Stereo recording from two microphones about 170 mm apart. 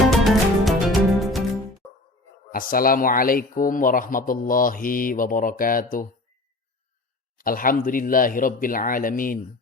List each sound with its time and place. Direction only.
0.0 s music: centre (ahead or behind)
2.5 s speech: 55° left (ahead or behind)
7.3 s speech: 55° left (ahead or behind)